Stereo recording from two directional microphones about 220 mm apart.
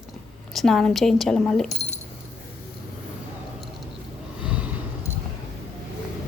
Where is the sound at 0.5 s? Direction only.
Centre (ahead or behind).